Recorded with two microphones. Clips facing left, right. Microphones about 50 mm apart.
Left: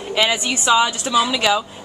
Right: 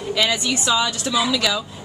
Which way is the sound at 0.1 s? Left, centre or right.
Left.